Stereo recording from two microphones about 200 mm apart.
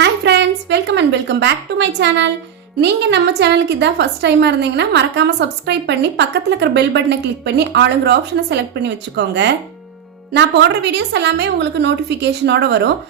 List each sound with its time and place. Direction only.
0.0 s a woman's voice: 60° right (ahead or behind)